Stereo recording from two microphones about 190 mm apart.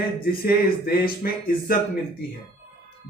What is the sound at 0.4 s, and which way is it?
Speech, 50° left (ahead or behind).